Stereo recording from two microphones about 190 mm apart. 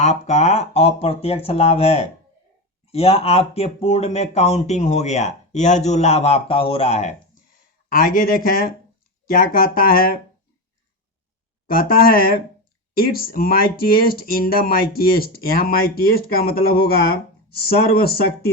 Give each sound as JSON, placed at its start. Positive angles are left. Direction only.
{"t": 0.0, "sound": "speech", "side_deg": 35}
{"t": 7.9, "sound": "speech", "side_deg": 45}
{"t": 11.6, "sound": "speech", "side_deg": 50}